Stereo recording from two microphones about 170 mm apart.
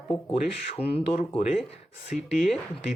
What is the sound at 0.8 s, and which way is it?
Speech, 10° right (ahead or behind).